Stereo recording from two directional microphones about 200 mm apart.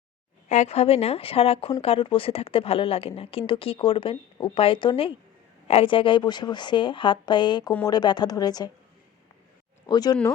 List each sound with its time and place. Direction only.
0.4 s speech: 35° left (ahead or behind); by 8.7 s 20° left (ahead or behind)
9.8 s speech: 20° left (ahead or behind)